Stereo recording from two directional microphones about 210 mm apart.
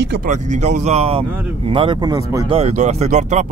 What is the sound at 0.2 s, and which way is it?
Speech, 35° right (ahead or behind).